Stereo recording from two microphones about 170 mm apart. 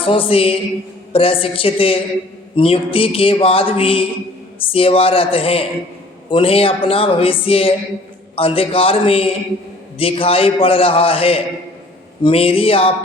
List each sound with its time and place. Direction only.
0.0 s speech: 30° left (ahead or behind)